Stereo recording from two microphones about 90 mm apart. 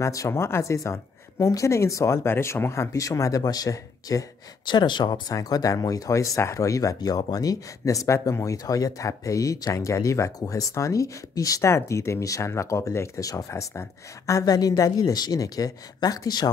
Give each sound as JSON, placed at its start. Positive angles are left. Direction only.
{"t": 0.0, "sound": "speech", "side_deg": 35}
{"t": 4.6, "sound": "speech", "side_deg": 60}
{"t": 5.3, "sound": "speech", "side_deg": 45}